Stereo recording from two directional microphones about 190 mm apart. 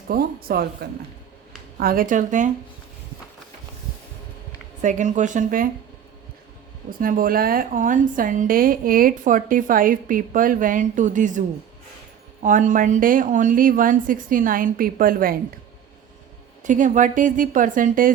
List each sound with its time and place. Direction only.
0.1 s a woman's voice: 50° right (ahead or behind)
4.8 s speech: 40° right (ahead or behind)
7.0 s a woman's voice: 50° right (ahead or behind)
16.6 s a woman's voice: 40° right (ahead or behind)